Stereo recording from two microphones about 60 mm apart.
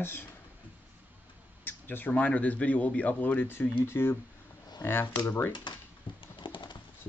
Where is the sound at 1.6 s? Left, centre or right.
Left.